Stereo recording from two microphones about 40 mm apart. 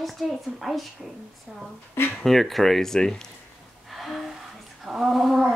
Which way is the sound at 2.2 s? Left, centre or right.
Centre.